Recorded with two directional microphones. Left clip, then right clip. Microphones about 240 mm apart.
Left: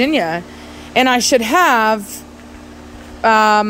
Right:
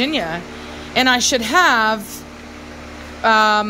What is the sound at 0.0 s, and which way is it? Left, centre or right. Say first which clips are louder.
A woman's voice: left 4 dB; centre.